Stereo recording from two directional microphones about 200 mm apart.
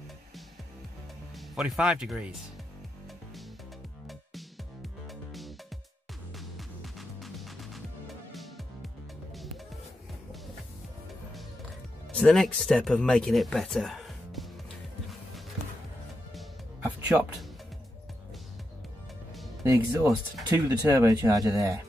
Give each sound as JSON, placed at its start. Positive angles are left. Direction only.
{"t": 1.3, "sound": "speech", "side_deg": 0}
{"t": 4.1, "sound": "music", "side_deg": 0}
{"t": 12.1, "sound": "speech", "side_deg": 5}
{"t": 16.3, "sound": "music", "side_deg": 0}
{"t": 19.6, "sound": "speech", "side_deg": -15}